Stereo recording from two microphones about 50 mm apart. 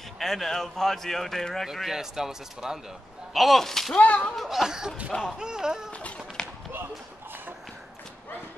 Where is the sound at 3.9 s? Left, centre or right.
Left.